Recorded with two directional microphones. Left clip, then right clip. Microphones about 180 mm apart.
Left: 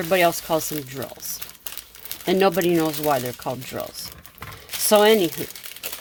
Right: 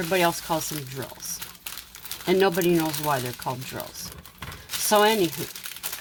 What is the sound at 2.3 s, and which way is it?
Speech, 55° left (ahead or behind).